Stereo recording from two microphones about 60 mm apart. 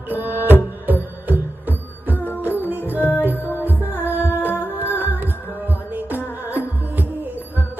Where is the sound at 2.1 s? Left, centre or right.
Left.